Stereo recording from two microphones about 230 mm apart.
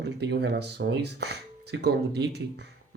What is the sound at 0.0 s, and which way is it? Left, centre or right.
Speech, right.